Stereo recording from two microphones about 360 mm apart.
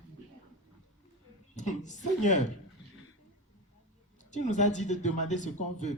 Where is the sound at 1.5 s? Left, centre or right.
Centre.